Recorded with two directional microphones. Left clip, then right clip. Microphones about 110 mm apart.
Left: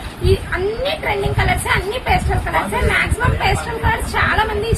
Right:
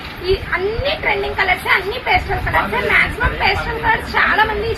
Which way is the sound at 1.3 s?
15° left (ahead or behind).